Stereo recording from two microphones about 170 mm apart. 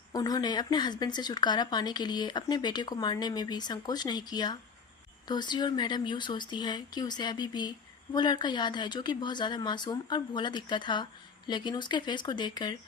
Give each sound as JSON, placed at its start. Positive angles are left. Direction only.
{"t": 0.1, "sound": "speech", "side_deg": 20}